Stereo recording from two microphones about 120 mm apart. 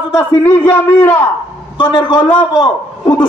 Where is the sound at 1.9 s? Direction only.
40° left (ahead or behind).